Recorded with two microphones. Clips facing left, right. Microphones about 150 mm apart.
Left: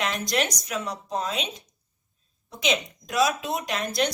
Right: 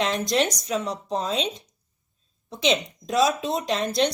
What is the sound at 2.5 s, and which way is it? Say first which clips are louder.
A woman's voice: right 3 dB; 30° right (ahead or behind).